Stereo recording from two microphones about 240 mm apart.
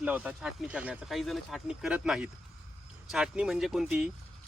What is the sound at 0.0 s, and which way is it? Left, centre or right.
Speech, centre.